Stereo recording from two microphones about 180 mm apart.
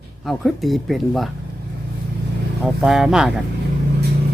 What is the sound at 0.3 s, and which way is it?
Speech, centre (ahead or behind).